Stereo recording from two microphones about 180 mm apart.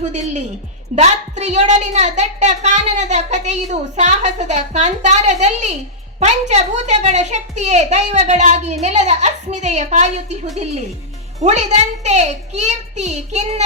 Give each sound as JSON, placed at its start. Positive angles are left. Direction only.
{"t": 0.0, "sound": "a woman's voice", "side_deg": -40}